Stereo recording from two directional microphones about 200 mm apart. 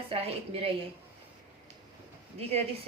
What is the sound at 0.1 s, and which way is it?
Speech, 30° right (ahead or behind).